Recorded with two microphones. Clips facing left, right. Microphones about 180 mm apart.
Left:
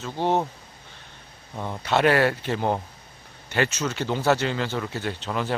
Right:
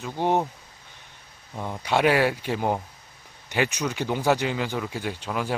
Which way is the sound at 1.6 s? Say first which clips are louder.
Left 1 dB; 10° right (ahead or behind).